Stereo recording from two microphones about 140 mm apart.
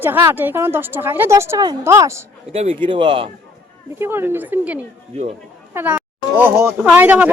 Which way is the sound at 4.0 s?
15° right (ahead or behind).